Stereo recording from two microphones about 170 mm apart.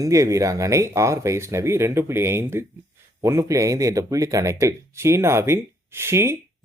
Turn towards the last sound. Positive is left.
turn(degrees=-15)  # may be behind; listen again after turning